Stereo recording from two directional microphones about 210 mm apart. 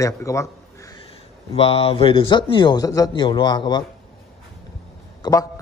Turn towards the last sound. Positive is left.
turn(degrees=15)  # may be behind; listen again after turning